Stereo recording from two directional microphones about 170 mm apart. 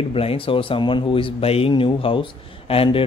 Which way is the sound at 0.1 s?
35° left (ahead or behind).